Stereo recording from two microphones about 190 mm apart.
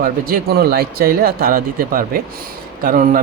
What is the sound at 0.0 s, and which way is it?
Speech, 50° right (ahead or behind).